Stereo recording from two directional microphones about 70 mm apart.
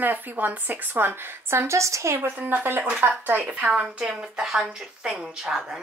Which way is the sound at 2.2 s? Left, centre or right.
Right.